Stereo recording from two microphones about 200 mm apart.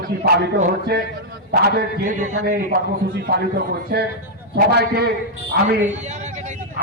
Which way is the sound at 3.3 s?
50° right (ahead or behind).